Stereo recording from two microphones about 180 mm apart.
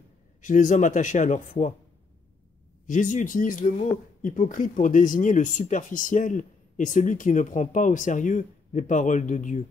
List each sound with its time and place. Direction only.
0.4 s speech: 45° left (ahead or behind)
2.9 s speech: 45° left (ahead or behind)